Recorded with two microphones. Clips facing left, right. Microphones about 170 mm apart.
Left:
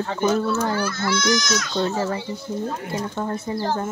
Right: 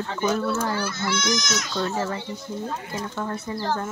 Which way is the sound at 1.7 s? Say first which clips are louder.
Left 3 dB; 25° left (ahead or behind).